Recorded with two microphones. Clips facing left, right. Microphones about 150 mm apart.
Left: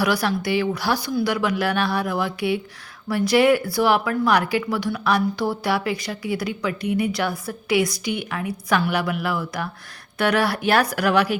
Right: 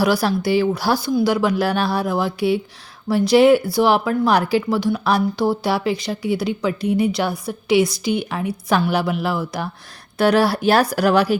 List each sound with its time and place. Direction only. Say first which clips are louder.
0.0 s speech: right 4 dB; 30° right (ahead or behind)